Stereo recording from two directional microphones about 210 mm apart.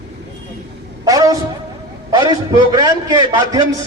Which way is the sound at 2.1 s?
20° right (ahead or behind).